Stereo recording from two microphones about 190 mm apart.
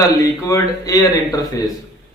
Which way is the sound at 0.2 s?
15° left (ahead or behind).